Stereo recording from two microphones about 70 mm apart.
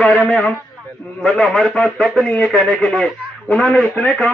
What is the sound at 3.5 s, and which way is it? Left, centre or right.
Speech, centre.